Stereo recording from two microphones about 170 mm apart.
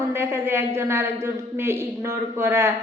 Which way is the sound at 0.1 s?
15° right (ahead or behind).